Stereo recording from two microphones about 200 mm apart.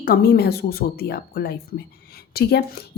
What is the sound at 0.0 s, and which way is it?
A woman's voice, 45° left (ahead or behind).